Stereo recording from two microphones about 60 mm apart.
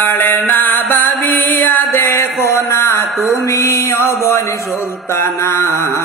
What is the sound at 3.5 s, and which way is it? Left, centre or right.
Music, left.